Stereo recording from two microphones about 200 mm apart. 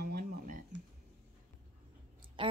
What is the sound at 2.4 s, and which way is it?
Speech, 25° right (ahead or behind).